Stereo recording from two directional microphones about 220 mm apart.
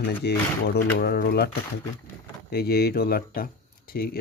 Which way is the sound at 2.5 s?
45° left (ahead or behind).